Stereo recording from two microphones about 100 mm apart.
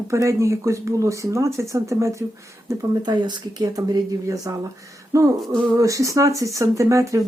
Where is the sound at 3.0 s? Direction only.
45° right (ahead or behind).